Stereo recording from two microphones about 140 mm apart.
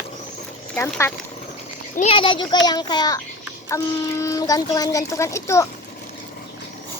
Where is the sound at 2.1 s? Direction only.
35° left (ahead or behind); by 5.7 s 20° left (ahead or behind).